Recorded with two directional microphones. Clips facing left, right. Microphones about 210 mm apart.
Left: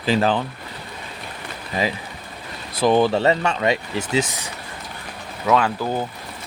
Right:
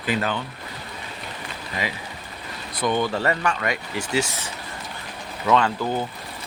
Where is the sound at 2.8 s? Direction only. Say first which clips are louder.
Left 6 dB; 30° left (ahead or behind).